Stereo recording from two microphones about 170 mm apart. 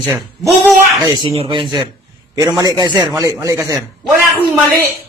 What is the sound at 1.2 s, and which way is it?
Speech, 30° right (ahead or behind).